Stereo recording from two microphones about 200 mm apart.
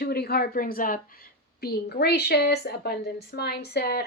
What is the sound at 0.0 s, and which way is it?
A woman's voice, 50° left (ahead or behind).